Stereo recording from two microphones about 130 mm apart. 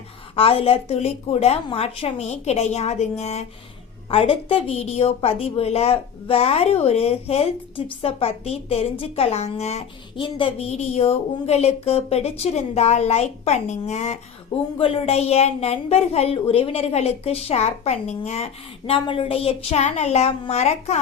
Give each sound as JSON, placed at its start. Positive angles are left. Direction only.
{"t": 0.3, "sound": "a woman's voice", "side_deg": 45}
{"t": 4.1, "sound": "a woman's voice", "side_deg": 45}
{"t": 10.2, "sound": "a woman's voice", "side_deg": 40}
{"t": 14.8, "sound": "a woman's voice", "side_deg": 45}